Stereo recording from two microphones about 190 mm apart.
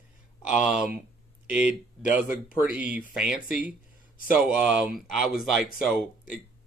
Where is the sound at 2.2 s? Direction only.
45° left (ahead or behind).